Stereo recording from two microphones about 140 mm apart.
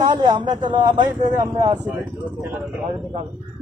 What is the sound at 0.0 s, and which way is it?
Speech, 30° right (ahead or behind).